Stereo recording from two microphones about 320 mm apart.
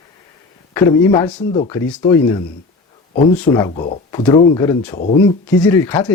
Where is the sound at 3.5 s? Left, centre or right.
Centre.